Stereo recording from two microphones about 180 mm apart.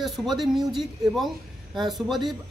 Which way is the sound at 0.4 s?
Centre (ahead or behind).